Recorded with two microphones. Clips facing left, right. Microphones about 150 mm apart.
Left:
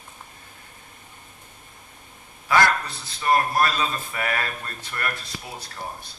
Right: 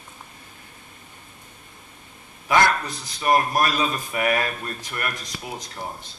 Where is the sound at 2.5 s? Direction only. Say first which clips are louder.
Right 1 dB; 20° right (ahead or behind).